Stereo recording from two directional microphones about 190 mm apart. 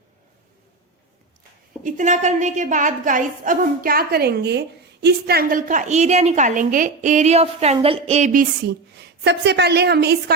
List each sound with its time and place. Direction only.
1.8 s a woman's voice: 40° right (ahead or behind); by 10.3 s 60° right (ahead or behind)